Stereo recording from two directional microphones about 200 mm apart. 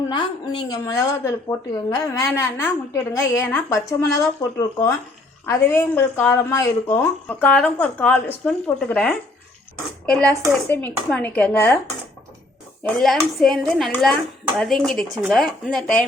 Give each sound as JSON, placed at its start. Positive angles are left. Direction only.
{"t": 0.1, "sound": "a woman's voice", "side_deg": 25}
{"t": 12.8, "sound": "speech", "side_deg": 0}